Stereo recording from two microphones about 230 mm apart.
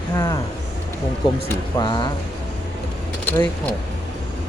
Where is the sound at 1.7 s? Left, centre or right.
Centre.